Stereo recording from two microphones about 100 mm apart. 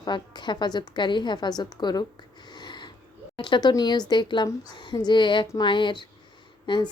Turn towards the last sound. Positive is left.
turn(degrees=45)  # may be behind; listen again after turning